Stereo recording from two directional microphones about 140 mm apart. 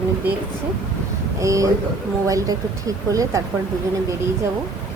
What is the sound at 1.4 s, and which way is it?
Speech, 25° right (ahead or behind).